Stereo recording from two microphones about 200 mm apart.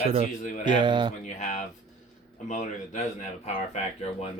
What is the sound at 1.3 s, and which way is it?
Speech, 35° left (ahead or behind).